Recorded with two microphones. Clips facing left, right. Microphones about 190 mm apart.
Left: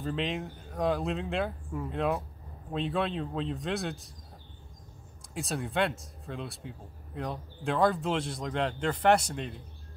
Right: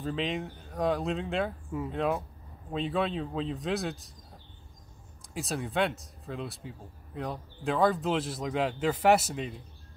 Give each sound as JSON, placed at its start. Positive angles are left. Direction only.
{"t": 0.0, "sound": "speech", "side_deg": 0}
{"t": 5.3, "sound": "speech", "side_deg": 0}